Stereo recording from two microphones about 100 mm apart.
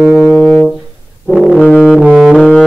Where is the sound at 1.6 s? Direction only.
15° left (ahead or behind).